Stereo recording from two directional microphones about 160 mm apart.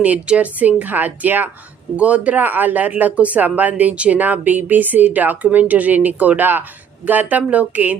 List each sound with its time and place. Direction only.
0.0 s speech: 10° right (ahead or behind)